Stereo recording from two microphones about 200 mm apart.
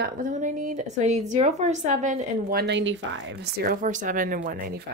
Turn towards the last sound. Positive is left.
turn(degrees=-45)  # may be behind; listen again after turning